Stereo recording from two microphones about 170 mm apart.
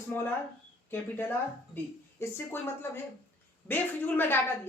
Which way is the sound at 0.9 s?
10° left (ahead or behind).